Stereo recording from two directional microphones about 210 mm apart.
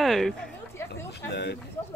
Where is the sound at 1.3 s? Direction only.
60° left (ahead or behind).